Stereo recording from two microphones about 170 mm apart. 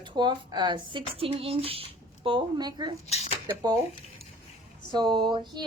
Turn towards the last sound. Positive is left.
turn(degrees=-25)  # may be behind; listen again after turning